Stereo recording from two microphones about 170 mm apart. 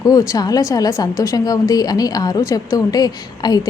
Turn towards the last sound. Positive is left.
turn(degrees=25)  # may be behind; listen again after turning